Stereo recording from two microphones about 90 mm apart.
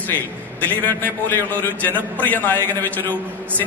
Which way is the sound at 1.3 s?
20° left (ahead or behind).